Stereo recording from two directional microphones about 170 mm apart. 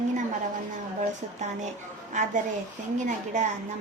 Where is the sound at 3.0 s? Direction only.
45° right (ahead or behind).